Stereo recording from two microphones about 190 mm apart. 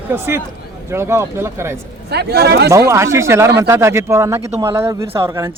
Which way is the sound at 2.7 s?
15° right (ahead or behind).